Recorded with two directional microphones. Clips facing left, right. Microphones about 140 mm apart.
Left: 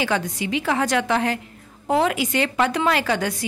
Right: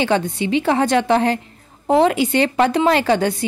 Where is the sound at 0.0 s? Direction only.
30° right (ahead or behind).